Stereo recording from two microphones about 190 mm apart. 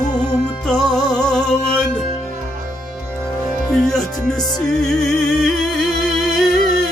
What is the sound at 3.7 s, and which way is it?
Music, centre (ahead or behind).